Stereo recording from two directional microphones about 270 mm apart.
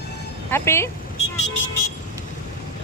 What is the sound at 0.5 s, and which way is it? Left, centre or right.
Speech, centre.